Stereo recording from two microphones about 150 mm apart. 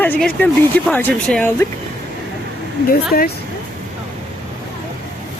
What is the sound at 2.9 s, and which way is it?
Speech, 85° left.